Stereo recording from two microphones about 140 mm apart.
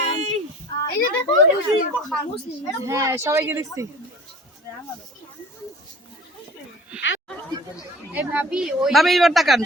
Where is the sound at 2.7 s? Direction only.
25° right (ahead or behind).